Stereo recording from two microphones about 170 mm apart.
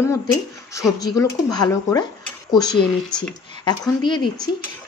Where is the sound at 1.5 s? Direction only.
20° left (ahead or behind).